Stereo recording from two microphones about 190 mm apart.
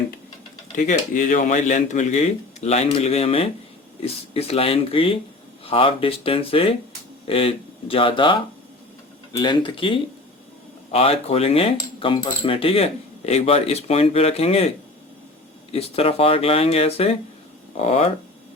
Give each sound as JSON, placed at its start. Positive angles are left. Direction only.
{"t": 0.8, "sound": "cutlery", "side_deg": 40}
{"t": 5.6, "sound": "speech", "side_deg": 30}
{"t": 9.4, "sound": "speech", "side_deg": 25}
{"t": 10.9, "sound": "cutlery", "side_deg": 30}
{"t": 15.7, "sound": "cutlery", "side_deg": 30}